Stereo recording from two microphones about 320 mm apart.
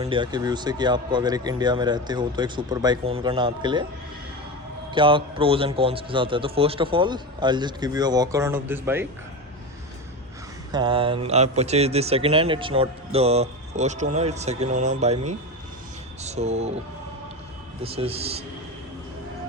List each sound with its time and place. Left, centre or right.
0.0 s a man's voice: centre
4.9 s a man's voice: centre
10.7 s a man's voice: centre
16.2 s speech: centre
17.8 s a man's voice: centre